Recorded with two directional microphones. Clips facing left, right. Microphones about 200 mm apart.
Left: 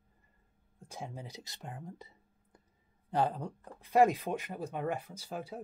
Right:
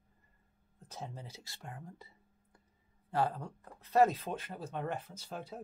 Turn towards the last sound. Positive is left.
turn(degrees=10)  # may be behind; listen again after turning